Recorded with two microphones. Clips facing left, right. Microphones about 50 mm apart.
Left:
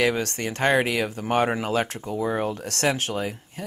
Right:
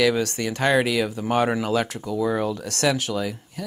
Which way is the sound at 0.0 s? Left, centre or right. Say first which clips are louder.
Right 2 dB; left.